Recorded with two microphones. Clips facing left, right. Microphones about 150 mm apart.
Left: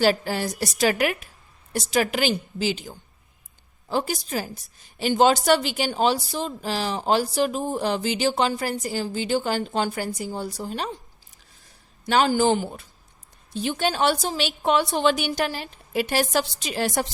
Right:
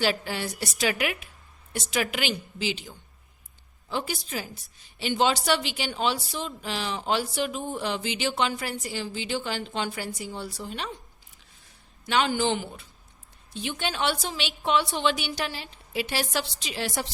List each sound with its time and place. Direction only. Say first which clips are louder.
0.0 s a woman's voice: left 6 dB; 40° left (ahead or behind)
12.0 s a woman's voice: left 5 dB; 40° left (ahead or behind)